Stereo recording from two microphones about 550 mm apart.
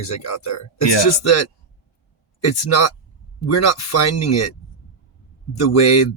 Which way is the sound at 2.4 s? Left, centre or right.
Left.